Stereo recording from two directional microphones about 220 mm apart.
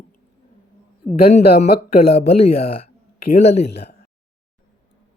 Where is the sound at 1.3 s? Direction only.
30° left (ahead or behind).